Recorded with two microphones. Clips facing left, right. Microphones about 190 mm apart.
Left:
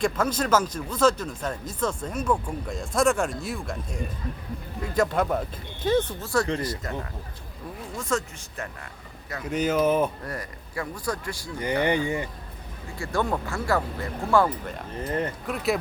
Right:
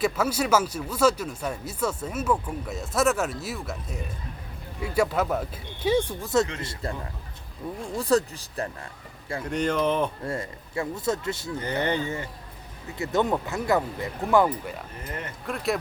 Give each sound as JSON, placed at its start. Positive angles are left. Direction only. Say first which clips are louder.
{"t": 0.0, "sound": "speech", "louder": "even", "side_deg": -10}
{"t": 6.6, "sound": "speech", "louder": "left 2 dB", "side_deg": -25}
{"t": 7.9, "sound": "speech", "louder": "right 6 dB", "side_deg": -35}
{"t": 9.5, "sound": "speech", "louder": "left 2 dB", "side_deg": 5}
{"t": 10.2, "sound": "speech", "louder": "right 4 dB", "side_deg": -25}
{"t": 11.6, "sound": "speech", "louder": "left 4 dB", "side_deg": 15}
{"t": 13.0, "sound": "speech", "louder": "right 2 dB", "side_deg": -20}
{"t": 15.0, "sound": "speech", "louder": "left 9 dB", "side_deg": 35}
{"t": 15.4, "sound": "speech", "louder": "right 2 dB", "side_deg": 0}